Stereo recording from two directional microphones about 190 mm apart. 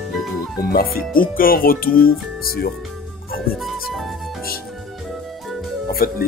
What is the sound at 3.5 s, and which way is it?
Music, centre (ahead or behind).